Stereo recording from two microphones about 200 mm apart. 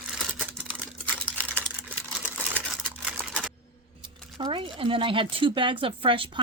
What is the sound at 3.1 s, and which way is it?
Typewriter, 5° right (ahead or behind).